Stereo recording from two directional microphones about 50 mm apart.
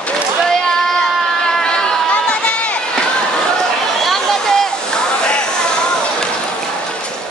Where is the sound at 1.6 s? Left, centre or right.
Centre.